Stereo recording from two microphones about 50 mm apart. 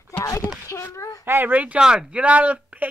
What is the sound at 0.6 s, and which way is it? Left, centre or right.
Speech, left.